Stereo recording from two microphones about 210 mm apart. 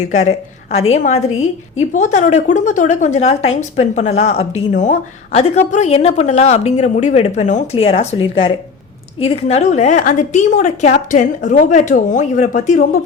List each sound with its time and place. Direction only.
0.1 s a woman's voice: 35° left (ahead or behind)